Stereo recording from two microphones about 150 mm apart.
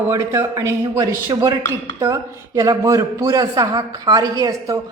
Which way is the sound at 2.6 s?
20° right (ahead or behind).